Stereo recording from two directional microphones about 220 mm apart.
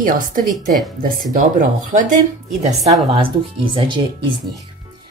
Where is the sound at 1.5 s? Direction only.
35° right (ahead or behind).